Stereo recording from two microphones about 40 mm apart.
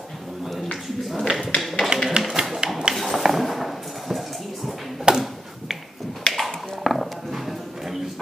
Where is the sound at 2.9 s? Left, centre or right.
Centre.